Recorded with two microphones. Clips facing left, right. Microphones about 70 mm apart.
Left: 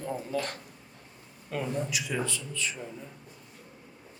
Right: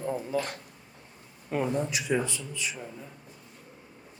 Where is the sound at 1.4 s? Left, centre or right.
Right.